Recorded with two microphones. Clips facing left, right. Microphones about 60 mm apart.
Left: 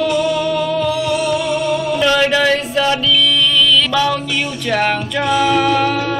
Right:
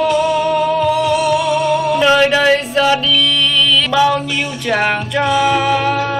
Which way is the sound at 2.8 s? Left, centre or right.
Centre.